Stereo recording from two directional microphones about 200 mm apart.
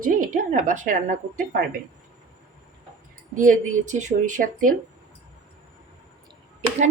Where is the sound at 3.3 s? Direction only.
40° right (ahead or behind).